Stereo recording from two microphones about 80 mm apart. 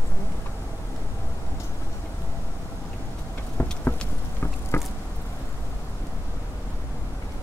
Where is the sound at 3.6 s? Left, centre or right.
Left.